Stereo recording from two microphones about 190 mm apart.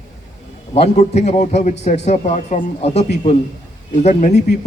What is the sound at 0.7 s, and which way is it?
A man's voice, 35° left (ahead or behind).